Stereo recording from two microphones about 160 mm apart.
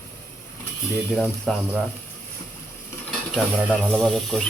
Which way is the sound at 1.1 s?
Centre (ahead or behind).